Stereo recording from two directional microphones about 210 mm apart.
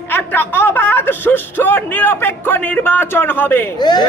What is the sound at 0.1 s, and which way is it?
Speech, 10° left (ahead or behind).